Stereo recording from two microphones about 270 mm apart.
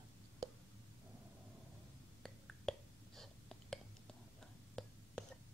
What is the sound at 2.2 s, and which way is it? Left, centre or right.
Whispering, centre.